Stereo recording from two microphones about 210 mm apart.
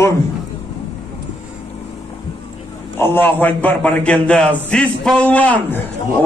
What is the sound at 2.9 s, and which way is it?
A man's voice, 10° left (ahead or behind).